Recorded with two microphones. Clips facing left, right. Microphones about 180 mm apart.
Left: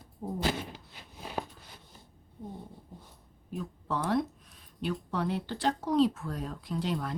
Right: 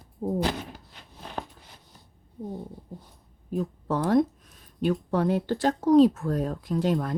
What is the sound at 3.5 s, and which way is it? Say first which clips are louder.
Speech: right 7 dB; 45° right (ahead or behind).